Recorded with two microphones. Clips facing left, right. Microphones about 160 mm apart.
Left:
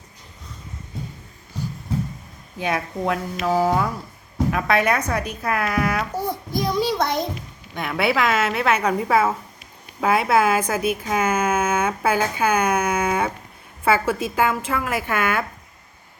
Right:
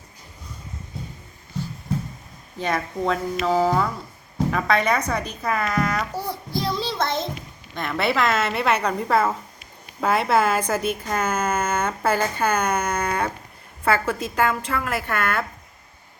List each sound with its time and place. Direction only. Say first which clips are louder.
2.6 s a woman's voice: even; 10° left (ahead or behind)
6.1 s a woman's voice: left 3 dB; 20° left (ahead or behind)